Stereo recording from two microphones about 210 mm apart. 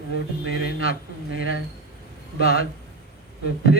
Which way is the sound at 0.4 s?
45° left (ahead or behind).